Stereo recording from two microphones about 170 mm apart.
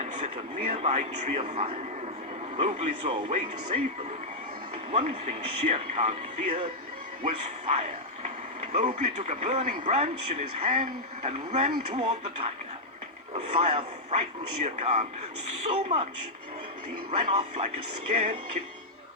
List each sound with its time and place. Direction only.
0.0 s a man's voice: 40° right (ahead or behind)
4.9 s a man's voice: 40° right (ahead or behind)
17.1 s a man's voice: 40° right (ahead or behind)